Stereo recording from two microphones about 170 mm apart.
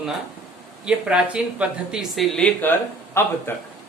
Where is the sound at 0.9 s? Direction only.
5° right (ahead or behind); by 3.3 s 15° left (ahead or behind).